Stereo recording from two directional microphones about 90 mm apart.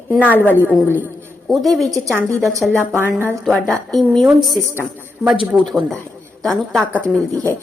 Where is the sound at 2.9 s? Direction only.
25° right (ahead or behind).